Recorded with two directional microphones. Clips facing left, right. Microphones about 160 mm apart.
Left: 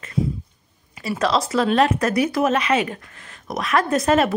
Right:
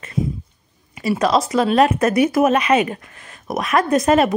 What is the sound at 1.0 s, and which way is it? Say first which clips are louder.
Speech: right 4 dB; 15° right (ahead or behind).